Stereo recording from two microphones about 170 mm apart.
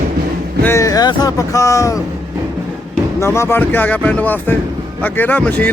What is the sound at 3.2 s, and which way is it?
Speech, 15° left (ahead or behind).